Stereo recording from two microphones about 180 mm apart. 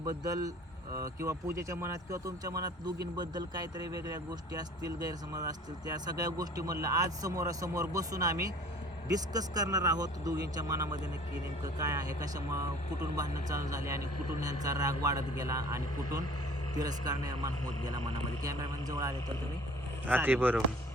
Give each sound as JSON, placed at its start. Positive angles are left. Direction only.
{"t": 0.0, "sound": "speech", "side_deg": -20}
{"t": 13.1, "sound": "speech", "side_deg": -20}